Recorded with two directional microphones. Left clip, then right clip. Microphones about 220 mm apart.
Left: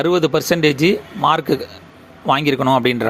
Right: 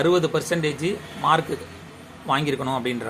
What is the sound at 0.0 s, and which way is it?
Speech, 40° left (ahead or behind).